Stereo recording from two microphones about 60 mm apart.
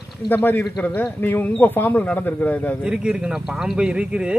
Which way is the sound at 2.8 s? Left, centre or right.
Centre.